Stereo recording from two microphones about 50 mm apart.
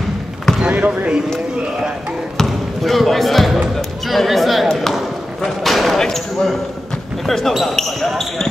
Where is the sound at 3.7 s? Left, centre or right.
Centre.